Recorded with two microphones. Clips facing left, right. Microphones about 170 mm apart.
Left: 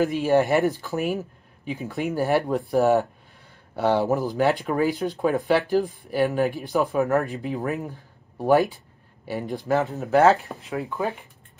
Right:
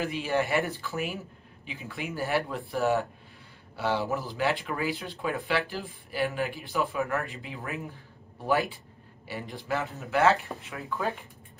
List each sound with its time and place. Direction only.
0.0 s speech: 40° left (ahead or behind)
9.7 s speech: 40° left (ahead or behind)